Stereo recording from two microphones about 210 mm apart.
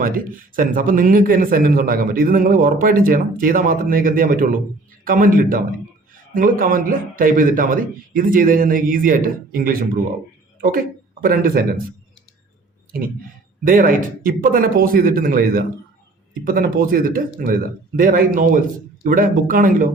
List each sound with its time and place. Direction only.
0.0 s a man's voice: 40° right (ahead or behind)
13.7 s a man's voice: 40° right (ahead or behind)